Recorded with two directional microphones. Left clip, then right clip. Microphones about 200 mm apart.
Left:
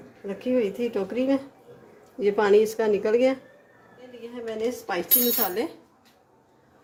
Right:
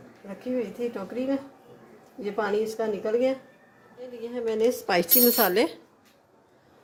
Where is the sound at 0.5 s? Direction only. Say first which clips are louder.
Left 5 dB; 35° left (ahead or behind).